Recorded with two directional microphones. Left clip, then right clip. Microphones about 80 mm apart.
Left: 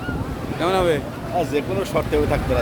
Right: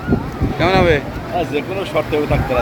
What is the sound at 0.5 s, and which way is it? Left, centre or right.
Speech, centre.